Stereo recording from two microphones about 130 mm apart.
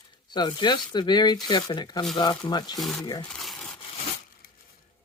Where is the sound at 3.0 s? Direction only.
35° left (ahead or behind).